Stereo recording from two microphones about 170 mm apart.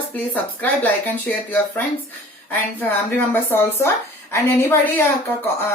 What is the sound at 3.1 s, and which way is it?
Speech, 10° left (ahead or behind).